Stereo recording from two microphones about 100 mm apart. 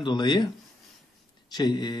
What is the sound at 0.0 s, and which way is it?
Speech, 50° left (ahead or behind).